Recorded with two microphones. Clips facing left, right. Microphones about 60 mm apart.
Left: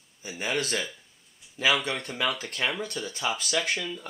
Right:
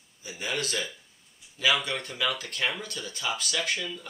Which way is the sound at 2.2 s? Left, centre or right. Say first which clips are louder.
Left 1 dB; left.